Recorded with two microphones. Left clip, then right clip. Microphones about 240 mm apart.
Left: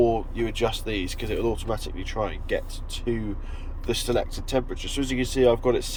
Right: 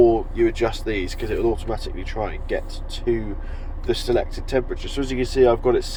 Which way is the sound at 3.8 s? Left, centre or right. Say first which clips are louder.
Right 4 dB; centre.